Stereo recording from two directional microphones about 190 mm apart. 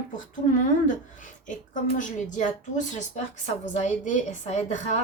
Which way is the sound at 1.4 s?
40° left (ahead or behind).